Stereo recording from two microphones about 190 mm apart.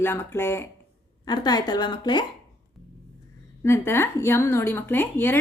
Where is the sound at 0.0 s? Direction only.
10° left (ahead or behind).